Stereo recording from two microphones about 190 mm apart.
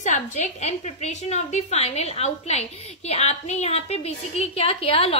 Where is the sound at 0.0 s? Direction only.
40° left (ahead or behind).